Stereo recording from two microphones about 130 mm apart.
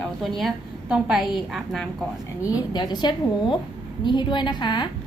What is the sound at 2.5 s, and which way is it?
A woman's voice, 35° left (ahead or behind).